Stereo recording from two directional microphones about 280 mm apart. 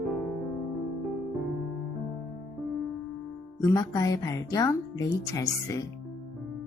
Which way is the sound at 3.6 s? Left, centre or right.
Centre.